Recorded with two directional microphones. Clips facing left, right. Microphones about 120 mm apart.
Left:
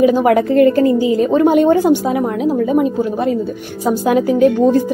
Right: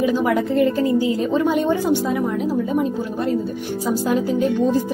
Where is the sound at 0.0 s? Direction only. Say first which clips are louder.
Left 7 dB; 60° left (ahead or behind).